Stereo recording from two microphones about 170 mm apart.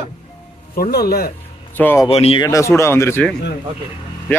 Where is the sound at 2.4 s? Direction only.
20° left (ahead or behind).